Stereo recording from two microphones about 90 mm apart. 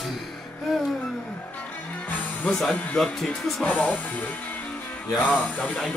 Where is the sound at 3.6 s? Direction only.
15° left (ahead or behind).